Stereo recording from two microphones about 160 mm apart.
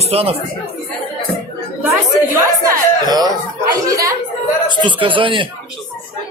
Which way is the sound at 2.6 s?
25° right (ahead or behind).